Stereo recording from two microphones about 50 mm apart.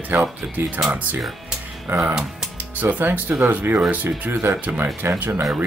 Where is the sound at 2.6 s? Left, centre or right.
Right.